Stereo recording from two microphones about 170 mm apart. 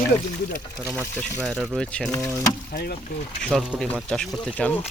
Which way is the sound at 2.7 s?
65° left (ahead or behind).